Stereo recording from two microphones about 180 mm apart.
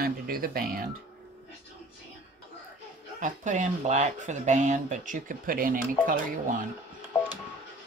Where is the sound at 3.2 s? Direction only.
45° right (ahead or behind).